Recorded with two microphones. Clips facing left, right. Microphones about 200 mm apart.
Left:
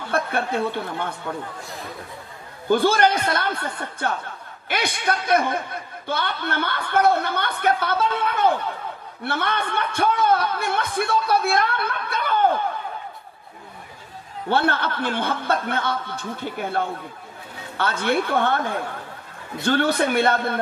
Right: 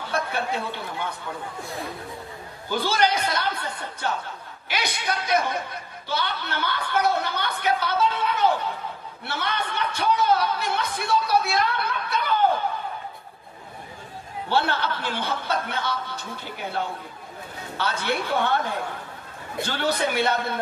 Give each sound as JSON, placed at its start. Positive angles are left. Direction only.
{"t": 0.1, "sound": "speech", "side_deg": 55}
{"t": 2.7, "sound": "a man's voice", "side_deg": 55}
{"t": 14.5, "sound": "a man's voice", "side_deg": 55}
{"t": 17.7, "sound": "a man's voice", "side_deg": 55}